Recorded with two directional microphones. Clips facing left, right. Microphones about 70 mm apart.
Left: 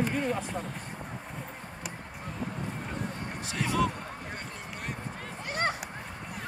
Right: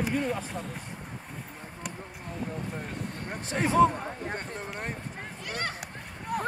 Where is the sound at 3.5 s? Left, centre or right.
Right.